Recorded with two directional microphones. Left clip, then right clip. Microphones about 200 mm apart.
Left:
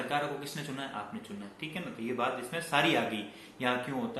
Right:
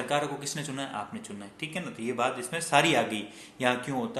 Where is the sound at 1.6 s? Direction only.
55° right (ahead or behind).